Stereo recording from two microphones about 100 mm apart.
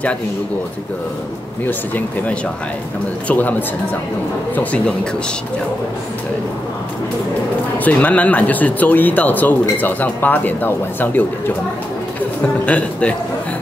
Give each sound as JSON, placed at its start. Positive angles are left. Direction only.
{"t": 1.7, "sound": "speech", "side_deg": 15}
{"t": 7.8, "sound": "speech", "side_deg": 15}
{"t": 12.6, "sound": "speech", "side_deg": 15}